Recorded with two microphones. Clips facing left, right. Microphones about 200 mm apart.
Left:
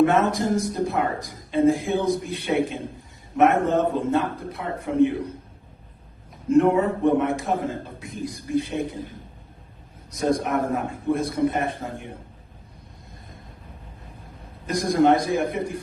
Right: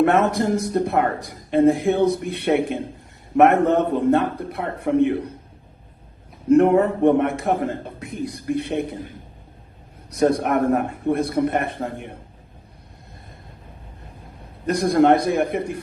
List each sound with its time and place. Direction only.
0.0 s speech: 65° right (ahead or behind)
6.5 s speech: 60° right (ahead or behind)
10.1 s speech: 60° right (ahead or behind)
14.7 s speech: 60° right (ahead or behind)